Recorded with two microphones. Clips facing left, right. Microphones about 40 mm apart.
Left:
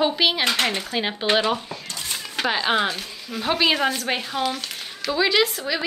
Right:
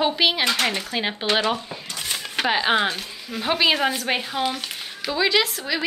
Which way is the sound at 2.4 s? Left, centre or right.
Centre.